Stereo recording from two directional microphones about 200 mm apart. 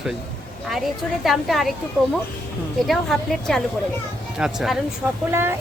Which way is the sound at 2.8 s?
Centre (ahead or behind).